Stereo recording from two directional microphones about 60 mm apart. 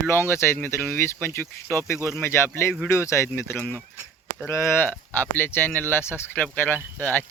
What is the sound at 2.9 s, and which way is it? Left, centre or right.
Speech, left.